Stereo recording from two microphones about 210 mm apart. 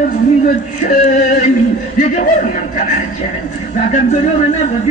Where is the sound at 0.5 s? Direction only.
40° left (ahead or behind).